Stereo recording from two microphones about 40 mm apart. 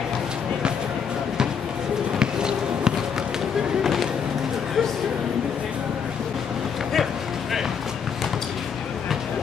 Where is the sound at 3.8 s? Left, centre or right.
Centre.